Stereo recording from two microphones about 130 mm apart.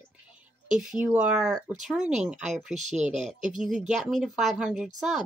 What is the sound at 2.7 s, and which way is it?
Speech, 65° right (ahead or behind).